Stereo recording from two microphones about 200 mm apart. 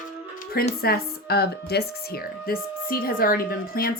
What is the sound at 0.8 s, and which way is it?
Speech, 50° left (ahead or behind).